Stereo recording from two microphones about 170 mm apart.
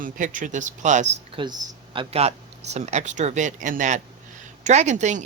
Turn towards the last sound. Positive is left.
turn(degrees=-45)  # may be behind; listen again after turning